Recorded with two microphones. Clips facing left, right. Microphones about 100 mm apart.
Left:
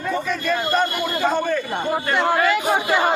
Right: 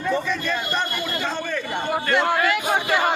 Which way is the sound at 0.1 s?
5° left (ahead or behind).